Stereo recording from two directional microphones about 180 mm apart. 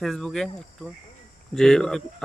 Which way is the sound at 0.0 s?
Centre (ahead or behind).